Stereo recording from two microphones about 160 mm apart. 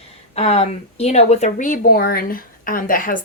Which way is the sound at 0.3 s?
40° left (ahead or behind).